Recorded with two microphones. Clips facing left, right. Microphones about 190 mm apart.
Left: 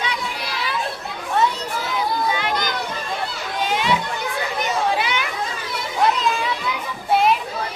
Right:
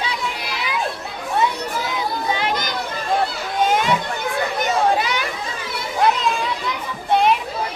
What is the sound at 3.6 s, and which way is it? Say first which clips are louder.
Children playing: right 3 dB; 45° right (ahead or behind).